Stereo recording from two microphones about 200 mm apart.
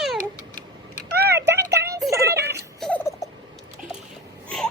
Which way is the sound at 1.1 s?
55° right (ahead or behind).